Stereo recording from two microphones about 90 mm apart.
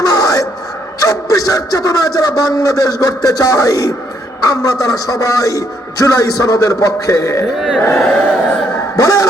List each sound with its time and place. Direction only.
0.0 s a sound: 45° left (ahead or behind)
1.0 s a man's voice: 40° left (ahead or behind)
7.5 s speech: 5° right (ahead or behind)
7.9 s music: 10° left (ahead or behind)
9.0 s a man's voice: 40° left (ahead or behind)